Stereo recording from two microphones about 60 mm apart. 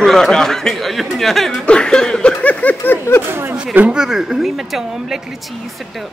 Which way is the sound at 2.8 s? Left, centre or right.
Left.